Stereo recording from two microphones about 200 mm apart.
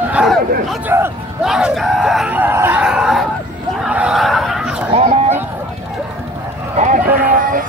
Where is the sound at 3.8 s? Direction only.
5° right (ahead or behind).